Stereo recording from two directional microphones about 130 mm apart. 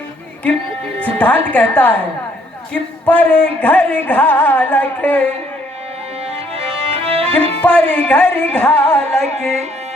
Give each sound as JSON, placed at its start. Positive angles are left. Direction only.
{"t": 0.9, "sound": "speech", "side_deg": 10}
{"t": 1.5, "sound": "music", "side_deg": 10}
{"t": 6.2, "sound": "music", "side_deg": -50}
{"t": 7.6, "sound": "music", "side_deg": 10}